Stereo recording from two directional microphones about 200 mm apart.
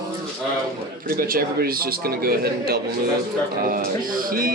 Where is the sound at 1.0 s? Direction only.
45° right (ahead or behind).